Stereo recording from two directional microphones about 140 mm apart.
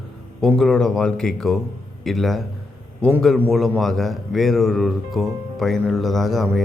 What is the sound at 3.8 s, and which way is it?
A man's voice, centre (ahead or behind).